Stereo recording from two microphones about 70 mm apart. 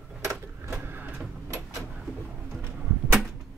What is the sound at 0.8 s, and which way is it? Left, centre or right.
Vehicle, right.